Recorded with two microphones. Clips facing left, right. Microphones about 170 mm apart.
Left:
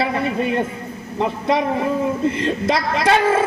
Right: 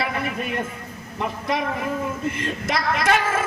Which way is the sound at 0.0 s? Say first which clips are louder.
Left 6 dB; 30° left (ahead or behind).